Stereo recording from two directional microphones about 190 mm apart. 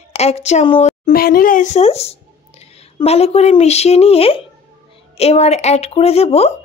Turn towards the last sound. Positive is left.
turn(degrees=30)  # may be behind; listen again after turning